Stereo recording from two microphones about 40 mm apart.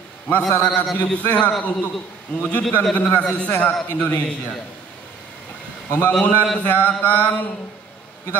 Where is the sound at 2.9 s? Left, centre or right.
Left.